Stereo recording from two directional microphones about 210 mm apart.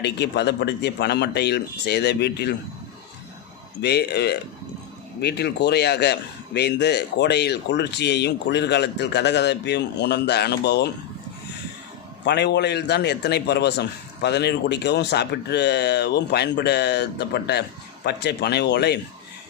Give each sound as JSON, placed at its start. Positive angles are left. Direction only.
{"t": 0.0, "sound": "a man's voice", "side_deg": 55}
{"t": 3.8, "sound": "a man's voice", "side_deg": 50}
{"t": 12.2, "sound": "a man's voice", "side_deg": 55}